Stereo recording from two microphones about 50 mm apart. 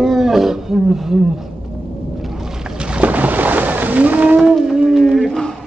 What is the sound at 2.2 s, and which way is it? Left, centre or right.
Boat, centre.